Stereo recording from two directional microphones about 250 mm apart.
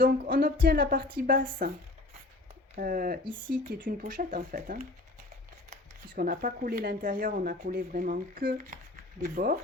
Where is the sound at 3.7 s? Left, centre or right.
Right.